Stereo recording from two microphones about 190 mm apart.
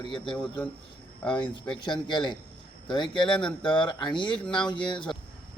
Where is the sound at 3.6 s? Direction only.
25° left (ahead or behind).